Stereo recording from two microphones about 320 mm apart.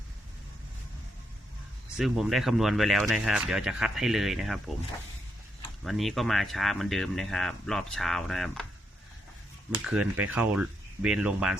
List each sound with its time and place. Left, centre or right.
2.0 s speech: centre
5.8 s speech: centre
9.8 s speech: centre